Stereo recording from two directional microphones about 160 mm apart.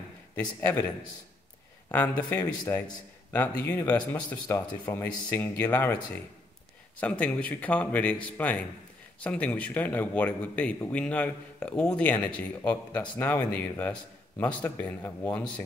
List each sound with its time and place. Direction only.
0.6 s speech: 15° left (ahead or behind)
1.9 s speech: 10° left (ahead or behind)